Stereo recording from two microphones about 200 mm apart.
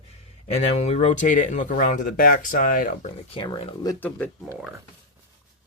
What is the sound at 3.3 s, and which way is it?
Speech, 25° left (ahead or behind).